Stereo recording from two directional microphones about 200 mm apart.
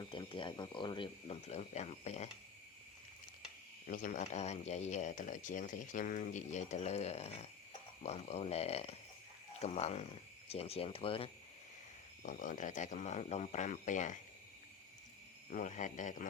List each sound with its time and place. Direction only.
0.0 s speech: 25° left (ahead or behind)
3.8 s speech: 45° left (ahead or behind); by 11.3 s 25° left (ahead or behind)
12.2 s speech: 40° left (ahead or behind)
15.4 s speech: 35° left (ahead or behind)